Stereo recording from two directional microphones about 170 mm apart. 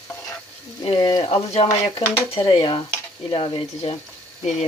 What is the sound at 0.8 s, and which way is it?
Speech, 30° left (ahead or behind).